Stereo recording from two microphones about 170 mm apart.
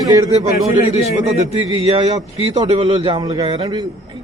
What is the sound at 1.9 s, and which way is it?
A man's voice, 40° right (ahead or behind).